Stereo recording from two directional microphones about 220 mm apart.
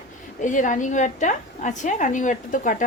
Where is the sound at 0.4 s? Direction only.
35° left (ahead or behind).